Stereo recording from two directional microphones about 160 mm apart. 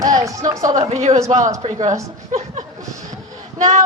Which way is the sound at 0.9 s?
40° right (ahead or behind).